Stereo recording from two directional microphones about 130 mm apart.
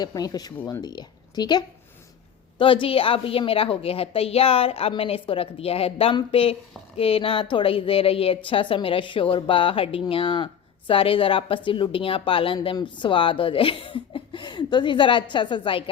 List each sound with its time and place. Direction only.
0.0 s a woman's voice: 30° left (ahead or behind)